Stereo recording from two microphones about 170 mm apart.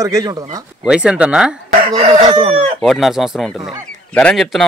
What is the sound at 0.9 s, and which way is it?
Speech, 5° right (ahead or behind).